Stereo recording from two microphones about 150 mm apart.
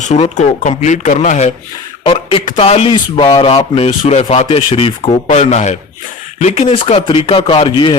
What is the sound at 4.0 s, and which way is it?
Speech, 45° left (ahead or behind).